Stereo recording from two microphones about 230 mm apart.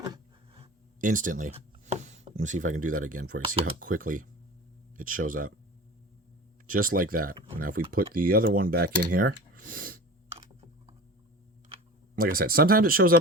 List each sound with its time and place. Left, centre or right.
1.0 s speech: right
3.4 s speech: right
3.8 s speech: right
6.7 s speech: right
10.3 s computer keyboard: right
12.1 s speech: right